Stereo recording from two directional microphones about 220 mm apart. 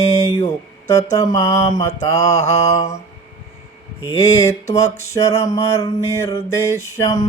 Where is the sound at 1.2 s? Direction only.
15° left (ahead or behind).